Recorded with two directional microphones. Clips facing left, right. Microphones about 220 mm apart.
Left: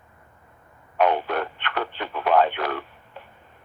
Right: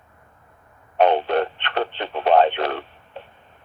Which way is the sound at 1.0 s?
25° right (ahead or behind).